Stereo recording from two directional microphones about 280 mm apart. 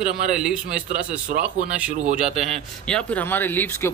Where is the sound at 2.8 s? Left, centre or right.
Centre.